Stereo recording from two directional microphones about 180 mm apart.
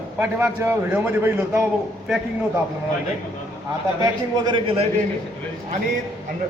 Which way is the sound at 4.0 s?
25° right (ahead or behind).